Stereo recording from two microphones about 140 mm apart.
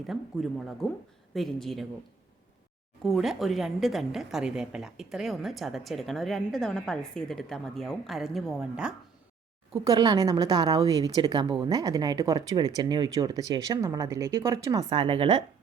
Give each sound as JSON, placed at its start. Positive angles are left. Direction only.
{"t": 0.1, "sound": "a woman's voice", "side_deg": 0}
{"t": 3.0, "sound": "a woman's voice", "side_deg": 0}
{"t": 9.8, "sound": "a woman's voice", "side_deg": -30}